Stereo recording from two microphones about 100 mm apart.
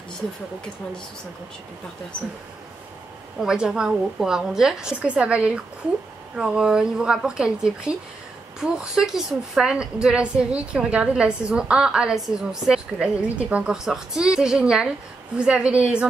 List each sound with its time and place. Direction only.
3.3 s a woman's voice: 5° right (ahead or behind)